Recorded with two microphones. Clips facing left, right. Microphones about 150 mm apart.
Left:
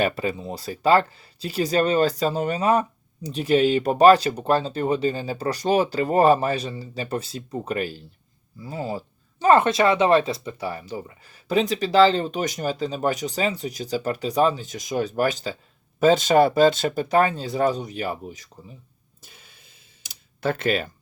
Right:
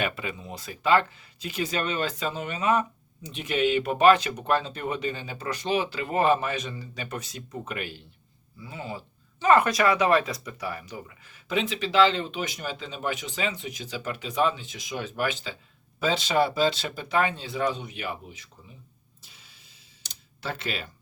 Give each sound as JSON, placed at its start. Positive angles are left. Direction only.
{"t": 0.0, "sound": "speech", "side_deg": 35}
{"t": 19.2, "sound": "a sound", "side_deg": 50}
{"t": 20.4, "sound": "speech", "side_deg": 50}